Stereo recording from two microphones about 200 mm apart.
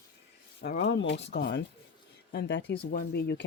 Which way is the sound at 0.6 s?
60° left (ahead or behind).